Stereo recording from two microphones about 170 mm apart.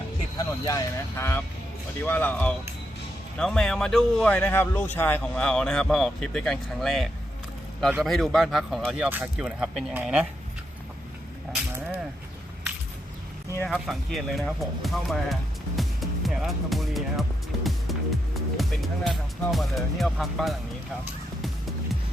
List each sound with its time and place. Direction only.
0.3 s speech: 20° left (ahead or behind); by 10.2 s 5° right (ahead or behind)
13.7 s speech: centre (ahead or behind)